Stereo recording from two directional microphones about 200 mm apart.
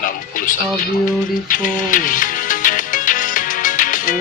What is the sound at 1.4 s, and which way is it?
Music, 40° left (ahead or behind).